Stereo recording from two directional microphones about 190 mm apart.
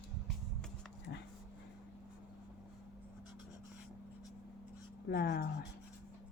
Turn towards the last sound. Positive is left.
turn(degrees=55)  # may be behind; listen again after turning